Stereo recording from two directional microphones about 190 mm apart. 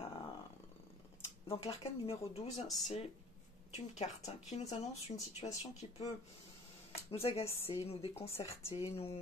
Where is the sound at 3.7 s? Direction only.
35° left (ahead or behind).